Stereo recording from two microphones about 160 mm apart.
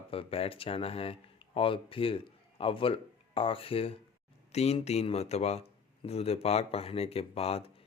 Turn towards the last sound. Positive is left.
turn(degrees=40)  # may be behind; listen again after turning